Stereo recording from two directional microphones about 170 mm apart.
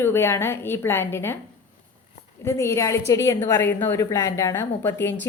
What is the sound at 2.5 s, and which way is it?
A woman's voice, 15° left (ahead or behind).